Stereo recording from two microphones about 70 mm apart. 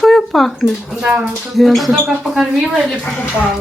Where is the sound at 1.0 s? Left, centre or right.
Right.